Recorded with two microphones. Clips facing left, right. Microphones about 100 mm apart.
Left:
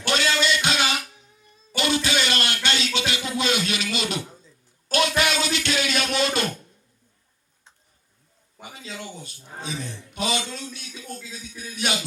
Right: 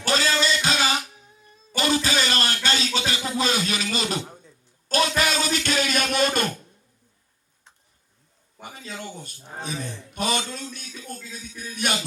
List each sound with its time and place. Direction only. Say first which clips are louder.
0.0 s music: even; 35° right (ahead or behind)
2.6 s a sound: left 1 dB; 35° right (ahead or behind)
8.6 s a man's voice: right 1 dB; 45° right (ahead or behind)